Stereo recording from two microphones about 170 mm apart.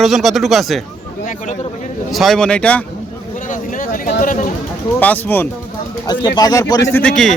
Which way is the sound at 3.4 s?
50° left (ahead or behind).